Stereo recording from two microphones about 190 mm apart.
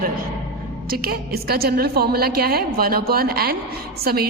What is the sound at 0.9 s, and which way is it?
A woman's voice, 50° right (ahead or behind).